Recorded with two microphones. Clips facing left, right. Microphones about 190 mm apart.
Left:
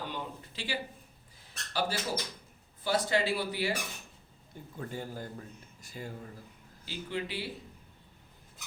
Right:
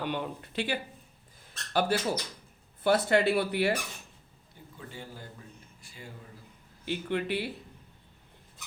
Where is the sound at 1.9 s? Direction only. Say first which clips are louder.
Right 6 dB; 60° right (ahead or behind).